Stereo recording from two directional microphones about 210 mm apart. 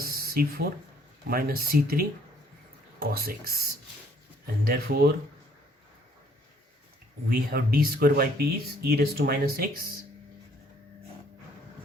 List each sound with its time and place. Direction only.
0.0 s a sound: 45° right (ahead or behind)
1.3 s speech: 45° right (ahead or behind)
7.5 s speech: 45° right (ahead or behind)